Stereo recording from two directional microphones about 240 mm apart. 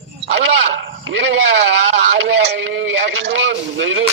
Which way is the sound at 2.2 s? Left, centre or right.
Right.